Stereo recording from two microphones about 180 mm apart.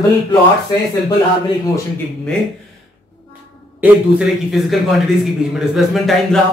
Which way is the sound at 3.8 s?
Centre (ahead or behind).